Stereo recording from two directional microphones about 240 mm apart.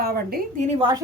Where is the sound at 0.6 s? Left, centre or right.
Centre.